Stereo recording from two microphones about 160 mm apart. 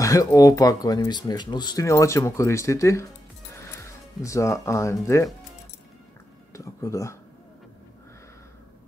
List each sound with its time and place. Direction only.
0.0 s speech: 20° left (ahead or behind)
6.5 s speech: 20° left (ahead or behind)